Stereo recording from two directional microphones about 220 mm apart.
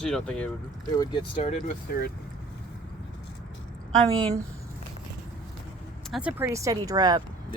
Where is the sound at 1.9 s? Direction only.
40° left (ahead or behind).